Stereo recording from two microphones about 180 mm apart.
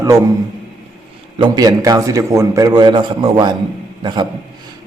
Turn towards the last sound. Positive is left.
turn(degrees=-25)  # may be behind; listen again after turning